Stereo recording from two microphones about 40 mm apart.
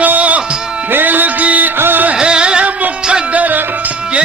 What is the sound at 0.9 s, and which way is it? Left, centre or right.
Music, right.